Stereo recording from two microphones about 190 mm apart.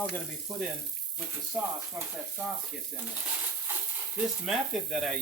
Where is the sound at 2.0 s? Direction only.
15° right (ahead or behind).